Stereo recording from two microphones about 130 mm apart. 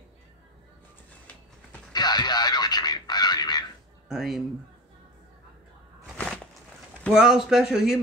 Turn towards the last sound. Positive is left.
turn(degrees=-5)  # may be behind; listen again after turning